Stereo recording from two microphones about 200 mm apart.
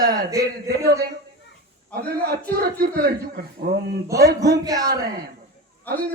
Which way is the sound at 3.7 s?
50° right (ahead or behind).